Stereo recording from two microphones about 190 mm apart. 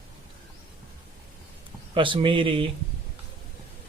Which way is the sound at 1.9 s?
25° right (ahead or behind).